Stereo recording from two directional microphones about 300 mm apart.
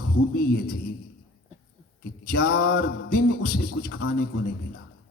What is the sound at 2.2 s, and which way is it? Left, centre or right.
Speech, left.